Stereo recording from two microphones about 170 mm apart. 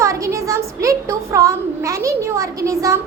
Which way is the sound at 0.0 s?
20° right (ahead or behind).